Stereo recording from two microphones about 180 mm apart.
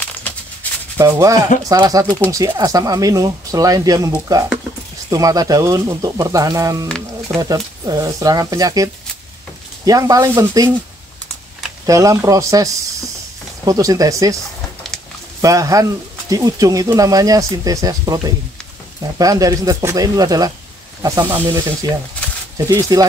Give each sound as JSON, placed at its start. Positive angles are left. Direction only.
{"t": 0.3, "sound": "music", "side_deg": 10}
{"t": 0.9, "sound": "speech", "side_deg": -15}
{"t": 11.8, "sound": "speech", "side_deg": -20}
{"t": 13.7, "sound": "speech", "side_deg": -20}
{"t": 15.4, "sound": "speech", "side_deg": -20}